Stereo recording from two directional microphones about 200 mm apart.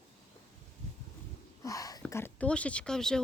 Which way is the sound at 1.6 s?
15° left (ahead or behind).